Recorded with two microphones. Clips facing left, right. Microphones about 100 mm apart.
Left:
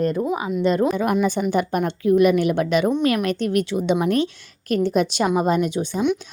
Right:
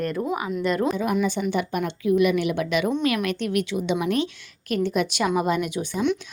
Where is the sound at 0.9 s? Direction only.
60° left (ahead or behind).